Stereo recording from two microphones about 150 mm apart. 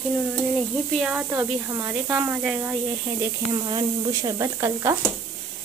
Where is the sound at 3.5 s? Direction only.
30° right (ahead or behind).